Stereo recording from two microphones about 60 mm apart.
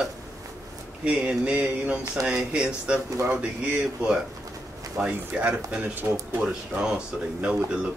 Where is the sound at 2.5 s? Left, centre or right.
Centre.